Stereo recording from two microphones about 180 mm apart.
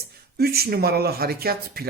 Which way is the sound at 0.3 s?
60° right (ahead or behind).